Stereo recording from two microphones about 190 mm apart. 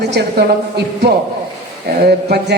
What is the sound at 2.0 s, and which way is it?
Speech, 60° right (ahead or behind).